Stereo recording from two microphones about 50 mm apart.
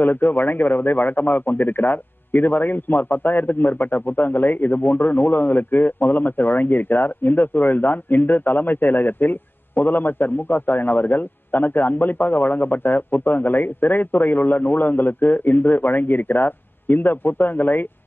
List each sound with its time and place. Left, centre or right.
0.0 s a man's voice: left